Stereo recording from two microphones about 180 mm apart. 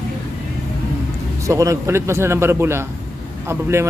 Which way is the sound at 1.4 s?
20° right (ahead or behind).